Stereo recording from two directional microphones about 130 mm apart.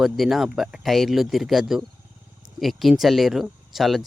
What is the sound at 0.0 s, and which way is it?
Speech, centre (ahead or behind).